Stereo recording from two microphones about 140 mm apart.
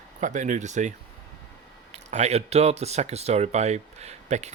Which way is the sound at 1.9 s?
50° right (ahead or behind).